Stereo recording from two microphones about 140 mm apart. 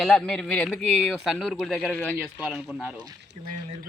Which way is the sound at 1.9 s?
10° left (ahead or behind).